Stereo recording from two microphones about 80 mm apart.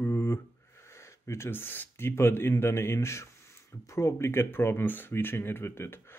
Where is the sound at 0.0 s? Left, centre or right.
Left.